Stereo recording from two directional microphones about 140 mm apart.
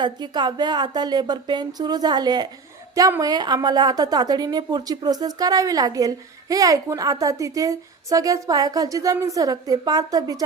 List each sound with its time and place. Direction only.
0.0 s a woman's voice: 30° right (ahead or behind)